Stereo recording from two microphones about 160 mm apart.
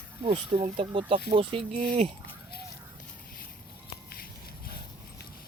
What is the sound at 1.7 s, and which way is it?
Speech, 50° right (ahead or behind).